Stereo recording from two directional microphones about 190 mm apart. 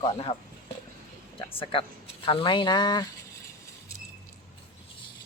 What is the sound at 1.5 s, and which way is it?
Speech, 30° left (ahead or behind).